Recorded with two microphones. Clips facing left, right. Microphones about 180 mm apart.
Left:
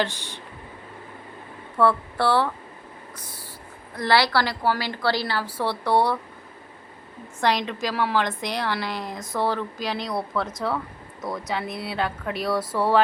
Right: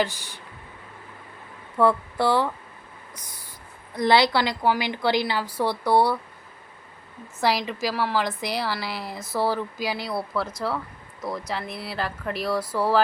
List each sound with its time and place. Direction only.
0.0 s a woman's voice: 10° right (ahead or behind)
1.8 s a woman's voice: 15° right (ahead or behind)
3.2 s a sound: 15° right (ahead or behind)
3.9 s a woman's voice: 20° right (ahead or behind)
7.4 s a woman's voice: 5° right (ahead or behind)